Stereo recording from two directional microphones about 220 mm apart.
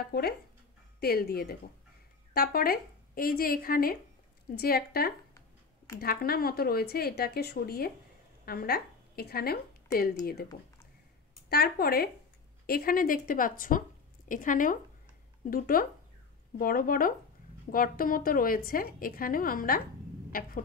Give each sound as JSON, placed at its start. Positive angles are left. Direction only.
{"t": 1.0, "sound": "a woman's voice", "side_deg": 45}
{"t": 11.4, "sound": "a woman's voice", "side_deg": 45}
{"t": 20.2, "sound": "a sound", "side_deg": 40}